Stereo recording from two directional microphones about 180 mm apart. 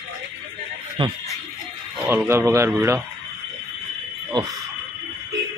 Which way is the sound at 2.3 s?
15° right (ahead or behind).